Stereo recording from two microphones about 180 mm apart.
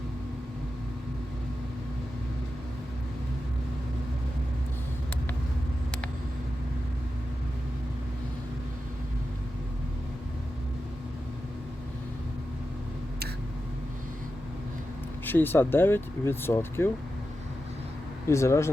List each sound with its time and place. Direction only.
15.2 s speech: 10° left (ahead or behind)
18.3 s speech: 15° left (ahead or behind)